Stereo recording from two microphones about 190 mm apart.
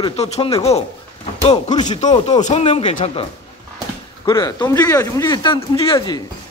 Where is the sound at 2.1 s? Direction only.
25° left (ahead or behind).